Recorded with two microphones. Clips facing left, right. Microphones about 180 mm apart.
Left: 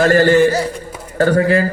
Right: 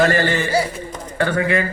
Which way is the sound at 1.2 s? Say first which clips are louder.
Left 6 dB; 40° left (ahead or behind).